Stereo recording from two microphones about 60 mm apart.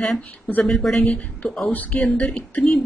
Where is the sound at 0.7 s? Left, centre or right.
Centre.